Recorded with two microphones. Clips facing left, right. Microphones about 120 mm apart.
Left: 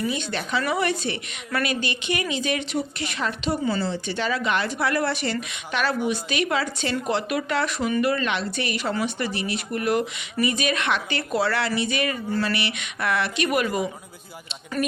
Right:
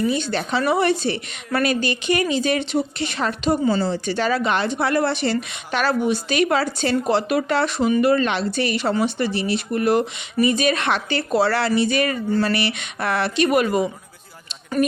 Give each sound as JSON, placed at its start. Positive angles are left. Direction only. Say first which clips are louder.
{"t": 0.1, "sound": "speech", "louder": "right 5 dB", "side_deg": -35}
{"t": 3.2, "sound": "speech", "louder": "right 5 dB", "side_deg": -40}
{"t": 14.8, "sound": "speech", "louder": "right 6 dB", "side_deg": -15}